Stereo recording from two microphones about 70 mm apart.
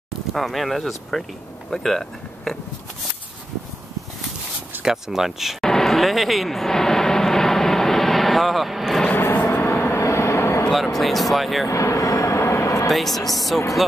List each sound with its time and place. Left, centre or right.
0.3 s speech: centre
4.8 s speech: centre
5.7 s vehicle: centre
9.1 s vehicle: left
9.9 s vehicle: left
10.7 s speech: centre
11.6 s vehicle: left
12.9 s speech: centre